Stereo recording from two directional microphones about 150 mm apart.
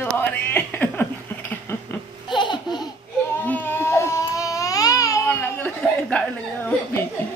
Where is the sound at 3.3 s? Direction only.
10° left (ahead or behind).